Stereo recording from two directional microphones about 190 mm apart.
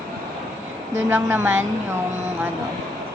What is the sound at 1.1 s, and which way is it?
Speech, 10° right (ahead or behind).